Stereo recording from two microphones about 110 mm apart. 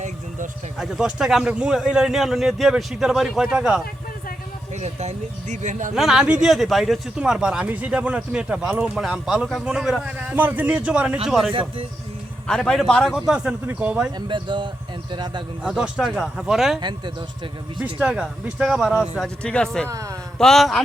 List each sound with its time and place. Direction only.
0.8 s a man's voice: 5° right (ahead or behind)
4.8 s speech: 90° right
5.9 s speech: 5° right (ahead or behind)
10.2 s a man's voice: 15° right (ahead or behind)
14.2 s speech: 45° right (ahead or behind)
15.6 s a man's voice: 10° right (ahead or behind)
18.0 s speech: 10° right (ahead or behind); by 19.9 s 5° left (ahead or behind)
19.9 s speech: 30° right (ahead or behind)
20.4 s a man's voice: 5° left (ahead or behind)